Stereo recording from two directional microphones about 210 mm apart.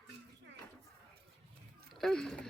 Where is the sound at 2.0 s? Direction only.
5° left (ahead or behind).